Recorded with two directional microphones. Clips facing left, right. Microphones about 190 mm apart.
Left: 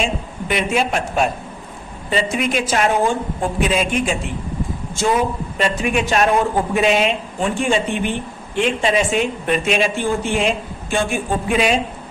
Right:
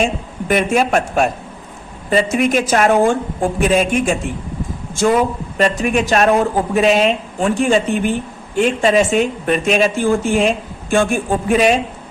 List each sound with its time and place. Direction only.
0.0 s a woman's voice: 45° right (ahead or behind)